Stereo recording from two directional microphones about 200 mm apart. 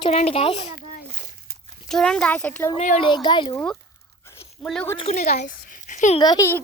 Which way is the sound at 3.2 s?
25° left (ahead or behind).